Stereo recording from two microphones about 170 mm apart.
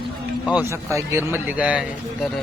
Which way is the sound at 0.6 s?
15° right (ahead or behind).